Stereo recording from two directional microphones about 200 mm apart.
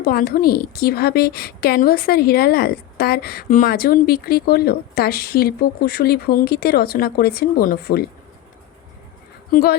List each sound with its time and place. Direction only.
0.0 s a woman's voice: 45° left (ahead or behind)
9.5 s a woman's voice: 50° left (ahead or behind)